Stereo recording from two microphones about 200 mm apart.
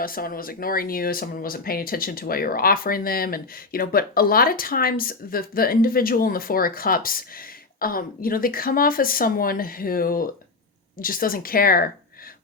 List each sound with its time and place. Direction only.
0.0 s speech: 45° left (ahead or behind)